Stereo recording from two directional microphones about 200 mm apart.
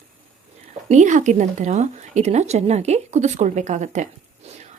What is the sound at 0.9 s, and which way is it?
Speech, 35° right (ahead or behind).